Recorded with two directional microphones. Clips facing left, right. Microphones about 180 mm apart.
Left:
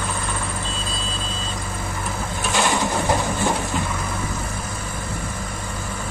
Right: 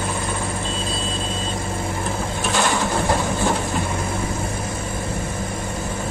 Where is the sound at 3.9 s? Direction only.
25° right (ahead or behind).